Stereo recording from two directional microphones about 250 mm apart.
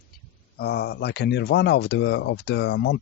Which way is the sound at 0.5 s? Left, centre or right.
Left.